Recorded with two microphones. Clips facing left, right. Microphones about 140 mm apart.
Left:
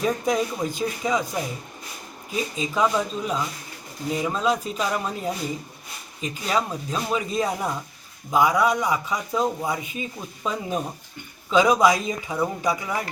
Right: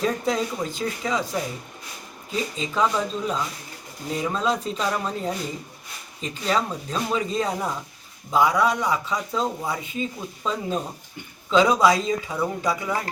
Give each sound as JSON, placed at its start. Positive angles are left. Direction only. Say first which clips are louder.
{"t": 0.0, "sound": "speech", "louder": "left 1 dB", "side_deg": 15}